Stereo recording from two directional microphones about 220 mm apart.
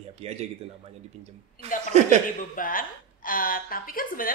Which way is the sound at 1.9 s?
30° right (ahead or behind).